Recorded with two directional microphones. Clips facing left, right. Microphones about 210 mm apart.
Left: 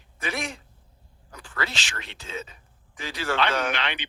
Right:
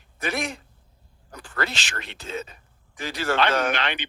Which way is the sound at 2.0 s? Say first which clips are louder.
Right 6 dB; 60° right (ahead or behind).